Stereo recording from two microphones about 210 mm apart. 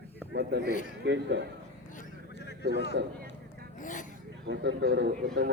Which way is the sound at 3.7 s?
40° left (ahead or behind).